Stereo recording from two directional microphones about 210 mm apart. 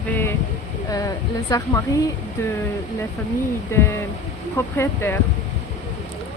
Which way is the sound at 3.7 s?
10° left (ahead or behind).